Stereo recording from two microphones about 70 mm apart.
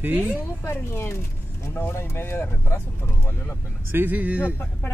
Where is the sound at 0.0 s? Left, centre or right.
Right.